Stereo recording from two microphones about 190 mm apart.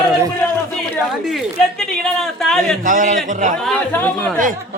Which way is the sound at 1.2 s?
Centre (ahead or behind).